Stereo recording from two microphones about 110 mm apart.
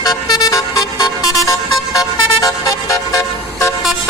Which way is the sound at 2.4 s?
30° left (ahead or behind).